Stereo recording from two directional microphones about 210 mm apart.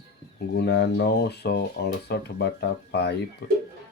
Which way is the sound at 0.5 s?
55° left (ahead or behind).